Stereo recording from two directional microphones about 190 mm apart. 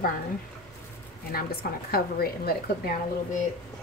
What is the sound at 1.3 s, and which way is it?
A woman's voice, 55° left (ahead or behind).